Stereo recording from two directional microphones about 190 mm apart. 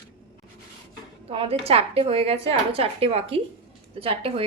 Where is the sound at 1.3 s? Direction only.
30° right (ahead or behind).